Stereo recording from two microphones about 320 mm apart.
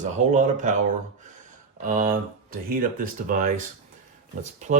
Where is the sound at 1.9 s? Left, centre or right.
Right.